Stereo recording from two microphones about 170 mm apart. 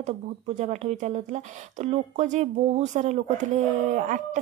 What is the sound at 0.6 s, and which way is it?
Speech, 45° right (ahead or behind).